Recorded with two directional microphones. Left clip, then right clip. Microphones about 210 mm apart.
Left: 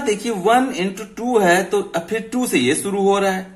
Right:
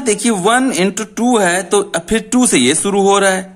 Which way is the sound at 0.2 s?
50° right (ahead or behind).